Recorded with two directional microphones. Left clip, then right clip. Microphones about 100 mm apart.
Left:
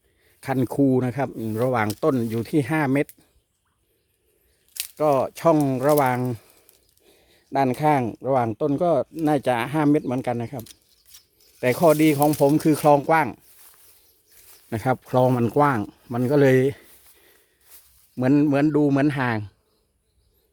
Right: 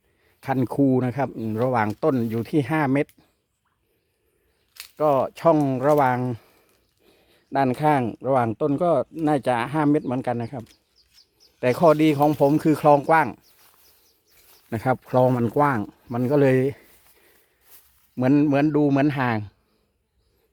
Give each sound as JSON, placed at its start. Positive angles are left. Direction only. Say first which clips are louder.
{"t": 0.3, "sound": "speech", "louder": "even", "side_deg": 10}
{"t": 1.5, "sound": "speech", "louder": "even", "side_deg": 15}
{"t": 4.9, "sound": "speech", "louder": "even", "side_deg": 25}
{"t": 11.6, "sound": "speech", "louder": "even", "side_deg": 20}
{"t": 14.7, "sound": "speech", "louder": "even", "side_deg": 15}
{"t": 15.4, "sound": "speech", "louder": "left 1 dB", "side_deg": 30}
{"t": 18.2, "sound": "a man's voice", "louder": "even", "side_deg": 5}